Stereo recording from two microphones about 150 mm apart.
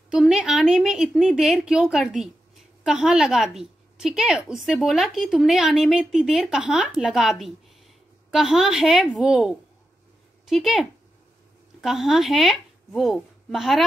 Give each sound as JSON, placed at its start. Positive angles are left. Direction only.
{"t": 0.1, "sound": "a woman's voice", "side_deg": -5}